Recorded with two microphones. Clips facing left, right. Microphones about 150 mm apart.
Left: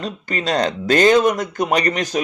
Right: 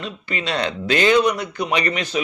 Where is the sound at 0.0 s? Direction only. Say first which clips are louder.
Left 3 dB; 40° left (ahead or behind).